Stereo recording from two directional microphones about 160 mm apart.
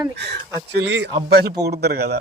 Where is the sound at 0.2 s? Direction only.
90° right.